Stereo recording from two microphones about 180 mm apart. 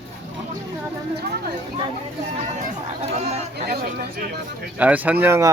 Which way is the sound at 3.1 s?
40° right (ahead or behind).